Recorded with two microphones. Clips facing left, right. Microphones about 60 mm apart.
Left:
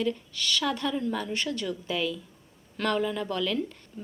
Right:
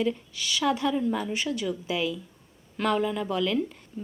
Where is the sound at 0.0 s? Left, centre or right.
Centre.